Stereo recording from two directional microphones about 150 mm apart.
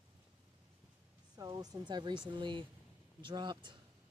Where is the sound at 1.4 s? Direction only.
25° right (ahead or behind).